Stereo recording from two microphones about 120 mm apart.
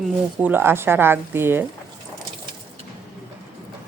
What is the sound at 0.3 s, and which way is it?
Speech, 15° right (ahead or behind).